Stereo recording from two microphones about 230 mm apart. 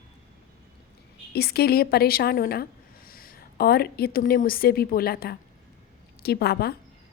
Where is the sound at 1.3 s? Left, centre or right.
Left.